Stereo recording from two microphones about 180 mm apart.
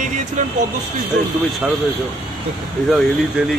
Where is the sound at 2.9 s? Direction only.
Centre (ahead or behind).